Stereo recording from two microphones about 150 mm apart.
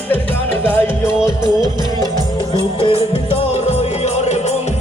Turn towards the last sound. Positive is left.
turn(degrees=35)  # may be behind; listen again after turning